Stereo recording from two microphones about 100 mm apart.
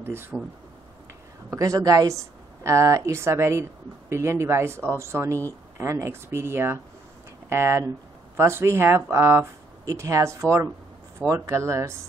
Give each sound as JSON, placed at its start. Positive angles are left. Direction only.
{"t": 0.0, "sound": "speech", "side_deg": -25}
{"t": 1.5, "sound": "a woman's voice", "side_deg": -35}